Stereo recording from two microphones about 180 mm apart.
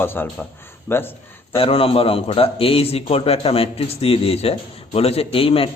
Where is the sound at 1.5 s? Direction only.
30° left (ahead or behind).